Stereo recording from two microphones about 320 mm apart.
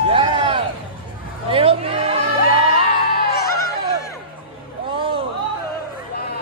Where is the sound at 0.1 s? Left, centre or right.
Centre.